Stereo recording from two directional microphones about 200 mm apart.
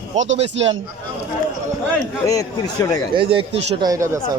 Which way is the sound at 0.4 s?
65° right (ahead or behind).